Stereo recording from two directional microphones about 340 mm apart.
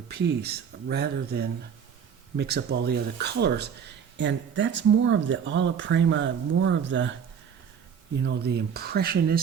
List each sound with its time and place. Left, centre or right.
0.1 s speech: right
8.2 s speech: right